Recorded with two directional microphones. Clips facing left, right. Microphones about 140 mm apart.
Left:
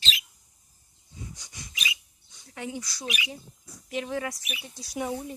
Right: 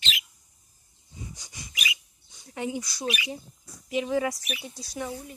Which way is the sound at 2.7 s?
15° right (ahead or behind).